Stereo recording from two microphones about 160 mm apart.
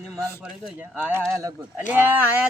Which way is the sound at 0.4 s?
10° right (ahead or behind).